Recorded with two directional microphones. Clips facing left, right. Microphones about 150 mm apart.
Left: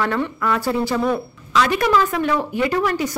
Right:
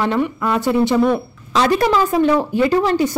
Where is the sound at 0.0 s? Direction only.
20° right (ahead or behind).